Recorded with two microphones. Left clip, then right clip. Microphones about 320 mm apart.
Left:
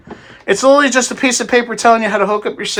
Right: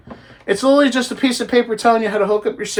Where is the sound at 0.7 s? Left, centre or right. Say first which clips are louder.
Left 4 dB; centre.